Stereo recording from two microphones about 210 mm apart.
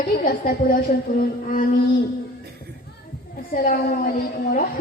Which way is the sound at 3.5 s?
40° left (ahead or behind).